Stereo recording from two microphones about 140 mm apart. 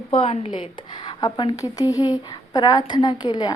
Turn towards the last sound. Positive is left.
turn(degrees=30)  # may be behind; listen again after turning